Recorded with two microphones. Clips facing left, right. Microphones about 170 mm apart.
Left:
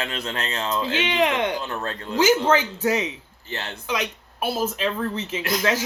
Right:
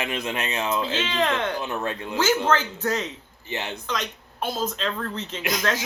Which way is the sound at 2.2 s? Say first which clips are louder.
Left 4 dB; 10° left (ahead or behind).